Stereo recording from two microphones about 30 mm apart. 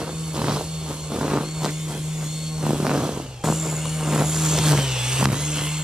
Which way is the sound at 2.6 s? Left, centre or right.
Right.